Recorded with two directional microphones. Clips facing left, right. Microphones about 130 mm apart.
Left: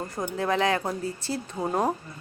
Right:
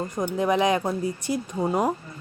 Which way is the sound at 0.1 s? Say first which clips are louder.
Right 3 dB; 20° right (ahead or behind).